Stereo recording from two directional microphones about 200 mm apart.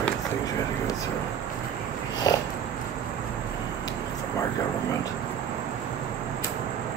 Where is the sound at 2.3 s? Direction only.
20° left (ahead or behind).